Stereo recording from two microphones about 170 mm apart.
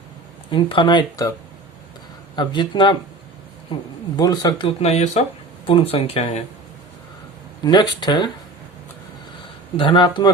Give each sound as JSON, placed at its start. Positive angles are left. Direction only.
{"t": 0.5, "sound": "speech", "side_deg": 30}
{"t": 2.3, "sound": "speech", "side_deg": 25}
{"t": 4.2, "sound": "speech", "side_deg": 25}
{"t": 7.6, "sound": "speech", "side_deg": 25}
{"t": 9.7, "sound": "speech", "side_deg": 30}